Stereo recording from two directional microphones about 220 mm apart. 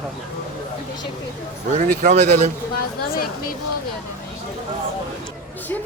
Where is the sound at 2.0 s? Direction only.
35° right (ahead or behind).